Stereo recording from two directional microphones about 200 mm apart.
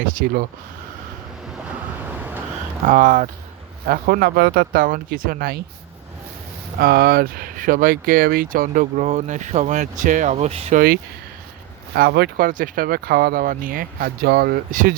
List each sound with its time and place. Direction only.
0.0 s speech: 45° right (ahead or behind)
2.8 s speech: 40° right (ahead or behind)
6.7 s speech: 50° right (ahead or behind); by 10.8 s 30° right (ahead or behind)
10.8 s speech: 50° right (ahead or behind)